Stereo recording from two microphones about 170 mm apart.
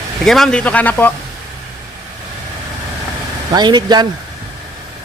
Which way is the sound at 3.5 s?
25° right (ahead or behind).